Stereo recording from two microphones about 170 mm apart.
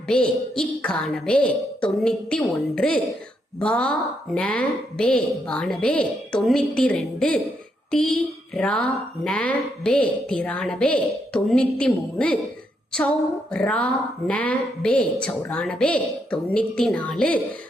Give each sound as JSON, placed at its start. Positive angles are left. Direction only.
{"t": 0.1, "sound": "a woman's voice", "side_deg": 5}
{"t": 13.5, "sound": "a woman's voice", "side_deg": 5}